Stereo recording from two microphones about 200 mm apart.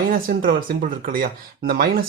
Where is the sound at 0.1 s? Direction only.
45° right (ahead or behind).